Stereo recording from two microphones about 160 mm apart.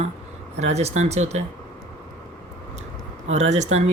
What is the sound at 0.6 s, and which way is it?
Speech, 45° right (ahead or behind).